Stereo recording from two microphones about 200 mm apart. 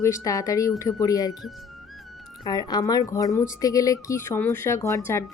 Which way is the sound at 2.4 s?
20° left (ahead or behind).